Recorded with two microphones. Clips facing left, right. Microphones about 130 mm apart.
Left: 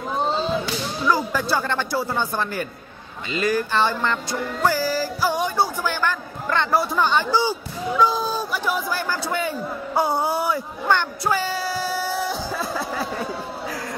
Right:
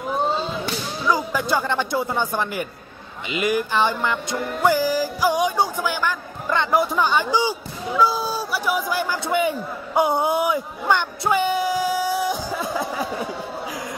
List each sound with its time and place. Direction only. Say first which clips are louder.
1.1 s music: right 2 dB; 15° right (ahead or behind)
8.0 s a man's voice: even; 10° right (ahead or behind)